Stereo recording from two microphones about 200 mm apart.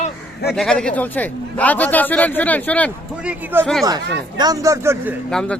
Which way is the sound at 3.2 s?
5° right (ahead or behind).